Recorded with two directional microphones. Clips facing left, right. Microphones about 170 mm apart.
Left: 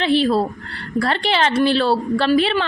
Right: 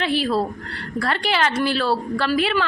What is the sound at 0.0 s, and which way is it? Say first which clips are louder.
A woman's voice: left 4 dB; 25° left (ahead or behind).